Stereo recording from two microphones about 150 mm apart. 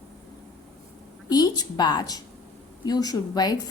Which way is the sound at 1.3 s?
25° left (ahead or behind).